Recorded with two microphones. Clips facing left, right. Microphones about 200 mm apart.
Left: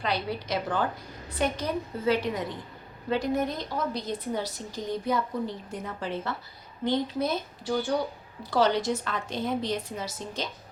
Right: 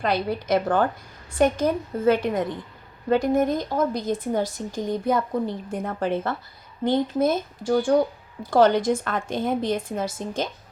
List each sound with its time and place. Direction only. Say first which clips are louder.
0.0 s a woman's voice: right 6 dB; 50° right (ahead or behind)